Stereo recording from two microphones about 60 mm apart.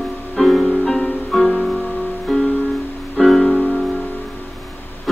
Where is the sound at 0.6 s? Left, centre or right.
Centre.